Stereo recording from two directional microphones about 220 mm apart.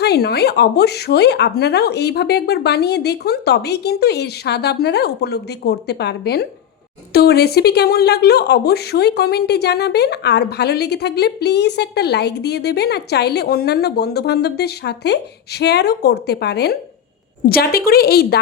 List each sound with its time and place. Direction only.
0.0 s speech: 45° left (ahead or behind)